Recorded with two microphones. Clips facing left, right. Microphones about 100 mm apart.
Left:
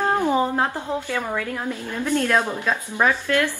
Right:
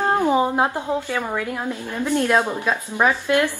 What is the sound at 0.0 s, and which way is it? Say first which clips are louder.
A woman's voice: right 2 dB; 15° right (ahead or behind).